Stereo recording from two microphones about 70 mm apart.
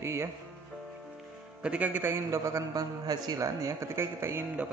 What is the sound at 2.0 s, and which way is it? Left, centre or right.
Speech, right.